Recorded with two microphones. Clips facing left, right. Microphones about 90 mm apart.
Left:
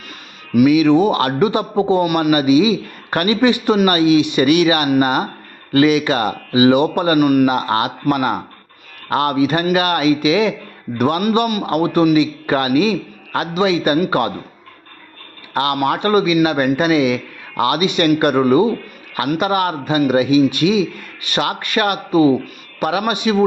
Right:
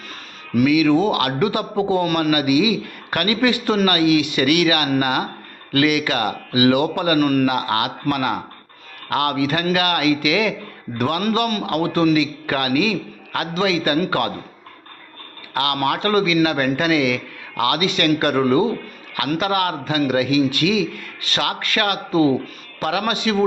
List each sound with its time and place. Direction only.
0.7 s a man's voice: 25° left (ahead or behind)
2.0 s a man's voice: 10° left (ahead or behind)
2.3 s a man's voice: 25° left (ahead or behind)
7.2 s a man's voice: 10° left (ahead or behind)
7.4 s a man's voice: 25° left (ahead or behind)
15.5 s a man's voice: 25° left (ahead or behind)